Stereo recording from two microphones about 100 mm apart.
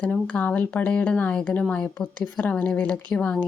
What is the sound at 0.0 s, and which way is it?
Speech, 15° left (ahead or behind).